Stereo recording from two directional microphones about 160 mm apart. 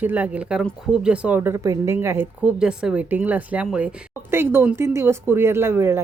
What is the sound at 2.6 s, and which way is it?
A woman's voice, 5° right (ahead or behind).